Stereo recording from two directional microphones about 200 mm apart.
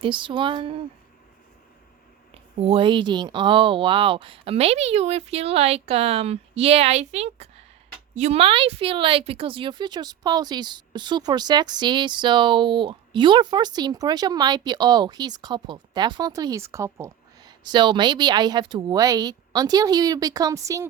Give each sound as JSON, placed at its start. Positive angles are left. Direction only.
{"t": 0.0, "sound": "a woman's voice", "side_deg": -25}
{"t": 2.3, "sound": "a woman's voice", "side_deg": -30}